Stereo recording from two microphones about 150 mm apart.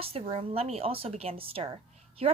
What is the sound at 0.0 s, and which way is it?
A woman's voice, 40° right (ahead or behind).